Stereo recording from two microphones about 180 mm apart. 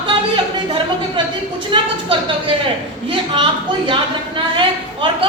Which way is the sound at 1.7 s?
30° right (ahead or behind).